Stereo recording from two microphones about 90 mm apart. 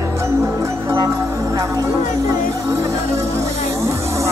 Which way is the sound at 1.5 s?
35° right (ahead or behind).